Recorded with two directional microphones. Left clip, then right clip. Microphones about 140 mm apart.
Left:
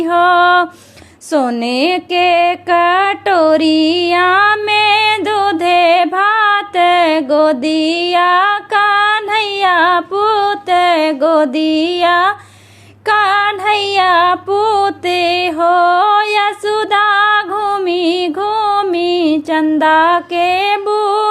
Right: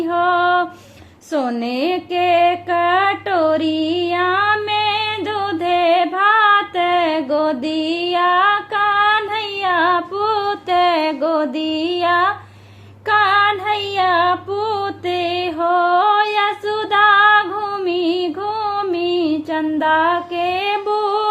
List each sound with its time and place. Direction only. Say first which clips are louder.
0.0 s music: left 6 dB; 35° left (ahead or behind)
1.3 s a sound: left 6 dB; 30° left (ahead or behind)
13.1 s female singing: left 2 dB; 30° left (ahead or behind)